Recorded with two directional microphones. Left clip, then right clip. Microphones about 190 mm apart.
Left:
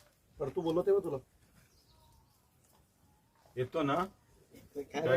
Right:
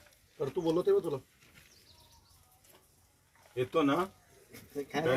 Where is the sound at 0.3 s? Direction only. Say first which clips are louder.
Right 2 dB; centre (ahead or behind).